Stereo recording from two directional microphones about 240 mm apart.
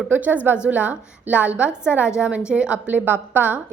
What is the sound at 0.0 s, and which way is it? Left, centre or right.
A woman's voice, centre.